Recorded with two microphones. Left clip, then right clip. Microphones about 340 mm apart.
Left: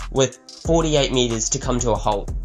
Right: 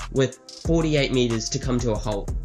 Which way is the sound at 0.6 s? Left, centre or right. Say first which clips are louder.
Left 4 dB; centre.